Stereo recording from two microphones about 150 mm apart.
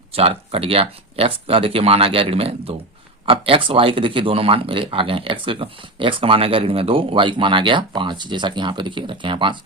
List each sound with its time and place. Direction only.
0.1 s speech: 40° right (ahead or behind)